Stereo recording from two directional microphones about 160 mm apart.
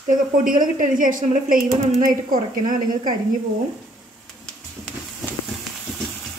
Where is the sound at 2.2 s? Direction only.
55° right (ahead or behind).